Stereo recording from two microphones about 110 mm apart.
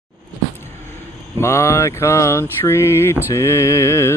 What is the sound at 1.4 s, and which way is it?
Music, 25° left (ahead or behind).